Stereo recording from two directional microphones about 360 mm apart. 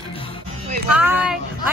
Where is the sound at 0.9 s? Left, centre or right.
Centre.